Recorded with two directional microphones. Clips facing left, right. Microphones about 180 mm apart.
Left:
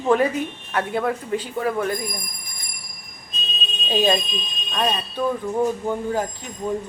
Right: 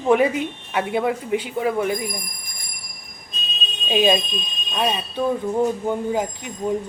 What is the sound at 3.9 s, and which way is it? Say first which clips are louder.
Speech: right 2 dB; 15° right (ahead or behind).